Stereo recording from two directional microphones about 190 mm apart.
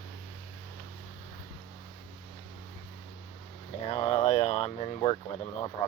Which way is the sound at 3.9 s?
30° left (ahead or behind).